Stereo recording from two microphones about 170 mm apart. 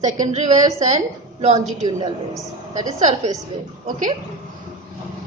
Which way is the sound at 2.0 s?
20° right (ahead or behind).